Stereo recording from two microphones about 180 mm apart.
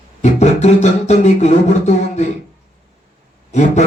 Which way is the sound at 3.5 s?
40° left (ahead or behind).